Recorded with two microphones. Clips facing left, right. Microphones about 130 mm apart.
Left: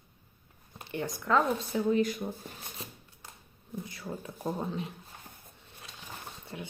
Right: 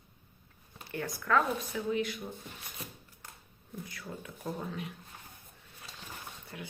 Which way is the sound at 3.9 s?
25° left (ahead or behind).